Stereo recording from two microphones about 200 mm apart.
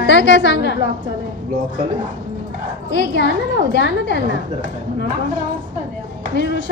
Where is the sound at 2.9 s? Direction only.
60° left (ahead or behind).